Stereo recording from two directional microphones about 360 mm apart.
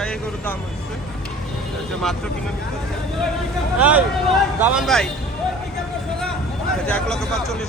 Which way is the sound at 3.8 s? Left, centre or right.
Centre.